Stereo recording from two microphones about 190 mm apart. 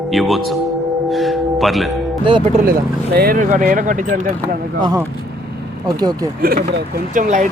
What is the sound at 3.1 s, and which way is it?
Speech, 50° right (ahead or behind).